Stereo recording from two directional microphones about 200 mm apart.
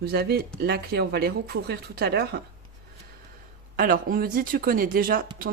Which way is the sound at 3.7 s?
45° right (ahead or behind).